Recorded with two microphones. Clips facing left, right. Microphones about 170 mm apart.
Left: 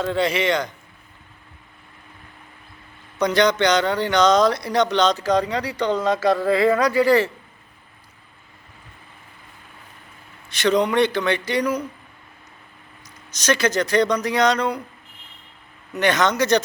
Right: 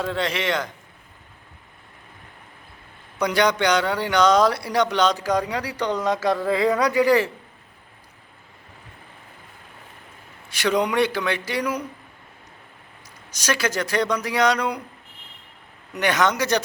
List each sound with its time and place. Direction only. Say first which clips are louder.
0.0 s a man's voice: left 4 dB; centre (ahead or behind)
3.2 s speech: left 2 dB; 10° right (ahead or behind)
6.1 s a man's voice: left 3 dB; centre (ahead or behind)
6.7 s speech: left 1 dB; 15° right (ahead or behind)
10.5 s speech: left 3 dB; 10° right (ahead or behind)
13.3 s speech: left 4 dB; 10° right (ahead or behind)
15.9 s speech: left 2 dB; 10° right (ahead or behind)